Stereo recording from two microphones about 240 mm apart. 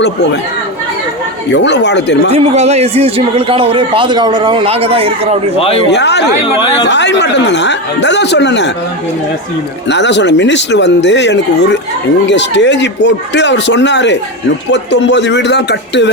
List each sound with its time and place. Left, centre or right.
1.5 s speech: left
2.3 s a man's voice: right
5.5 s speech: left
5.9 s speech: left
9.9 s speech: left